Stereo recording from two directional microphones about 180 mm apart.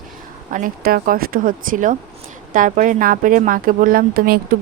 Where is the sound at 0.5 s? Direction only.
50° right (ahead or behind).